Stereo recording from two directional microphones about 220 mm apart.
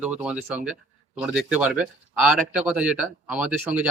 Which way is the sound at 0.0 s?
5° right (ahead or behind).